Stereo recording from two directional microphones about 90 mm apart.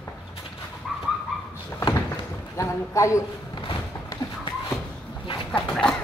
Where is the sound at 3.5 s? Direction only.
65° left (ahead or behind).